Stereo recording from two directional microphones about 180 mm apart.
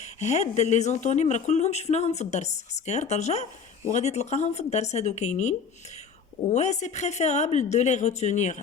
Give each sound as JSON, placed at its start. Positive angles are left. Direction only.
{"t": 0.0, "sound": "speech", "side_deg": 40}